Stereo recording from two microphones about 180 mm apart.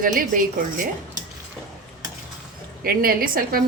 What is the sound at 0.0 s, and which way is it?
Speech, 50° right (ahead or behind).